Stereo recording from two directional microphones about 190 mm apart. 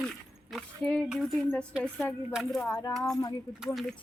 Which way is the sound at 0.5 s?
5° left (ahead or behind).